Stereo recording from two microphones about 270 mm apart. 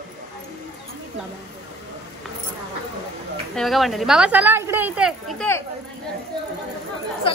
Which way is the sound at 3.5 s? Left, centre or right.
Centre.